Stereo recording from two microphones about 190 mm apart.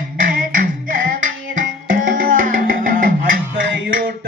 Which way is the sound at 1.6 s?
45° right (ahead or behind).